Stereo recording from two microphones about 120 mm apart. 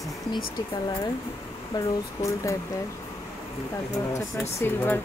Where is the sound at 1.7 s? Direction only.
25° left (ahead or behind).